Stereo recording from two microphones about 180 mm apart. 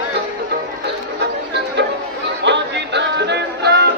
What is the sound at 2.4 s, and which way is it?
Music, 75° right (ahead or behind).